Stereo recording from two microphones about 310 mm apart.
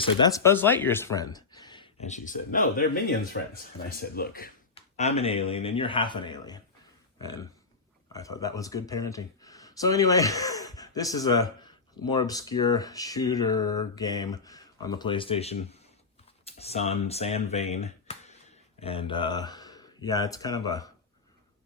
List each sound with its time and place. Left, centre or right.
0.0 s speech: centre